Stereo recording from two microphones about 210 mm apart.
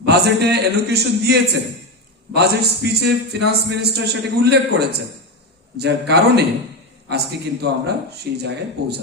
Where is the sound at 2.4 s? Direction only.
50° right (ahead or behind).